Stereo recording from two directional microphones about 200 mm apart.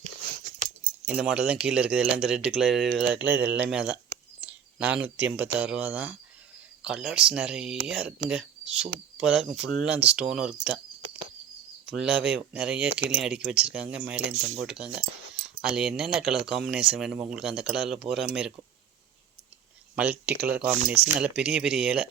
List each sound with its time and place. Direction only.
1.0 s speech: 5° right (ahead or behind)
3.2 s speech: 55° right (ahead or behind)
3.7 s a sound: 5° right (ahead or behind)
5.0 s speech: 5° right (ahead or behind)
11.9 s speech: centre (ahead or behind)
20.0 s speech: 5° right (ahead or behind)